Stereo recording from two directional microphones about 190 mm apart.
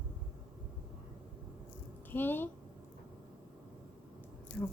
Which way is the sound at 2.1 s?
10° left (ahead or behind).